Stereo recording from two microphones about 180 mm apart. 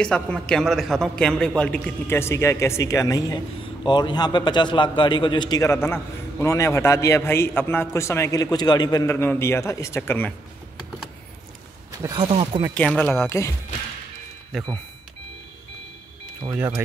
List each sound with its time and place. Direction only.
0.0 s a man's voice: 5° left (ahead or behind)
12.0 s speech: 25° right (ahead or behind)
12.7 s a man's voice: 5° left (ahead or behind)
16.5 s speech: 15° right (ahead or behind)